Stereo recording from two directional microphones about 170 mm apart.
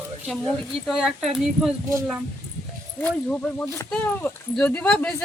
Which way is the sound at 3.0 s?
5° left (ahead or behind).